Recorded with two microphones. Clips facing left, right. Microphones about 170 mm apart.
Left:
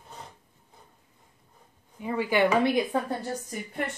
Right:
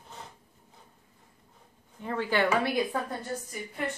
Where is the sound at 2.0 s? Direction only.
10° left (ahead or behind).